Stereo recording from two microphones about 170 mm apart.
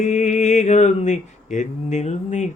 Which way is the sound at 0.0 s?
45° left (ahead or behind).